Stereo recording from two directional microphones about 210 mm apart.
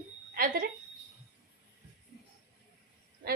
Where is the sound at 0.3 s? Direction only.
45° right (ahead or behind).